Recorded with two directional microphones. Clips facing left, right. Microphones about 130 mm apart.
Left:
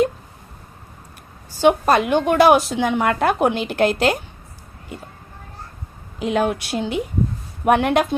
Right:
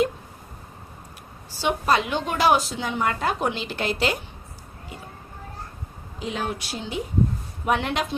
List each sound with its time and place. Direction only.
1.6 s speech: 55° left (ahead or behind)
6.1 s speech: 60° left (ahead or behind)